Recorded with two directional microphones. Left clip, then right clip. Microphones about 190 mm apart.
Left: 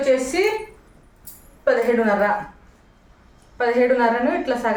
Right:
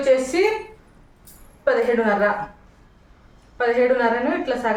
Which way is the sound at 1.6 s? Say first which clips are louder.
Left 1 dB; centre (ahead or behind).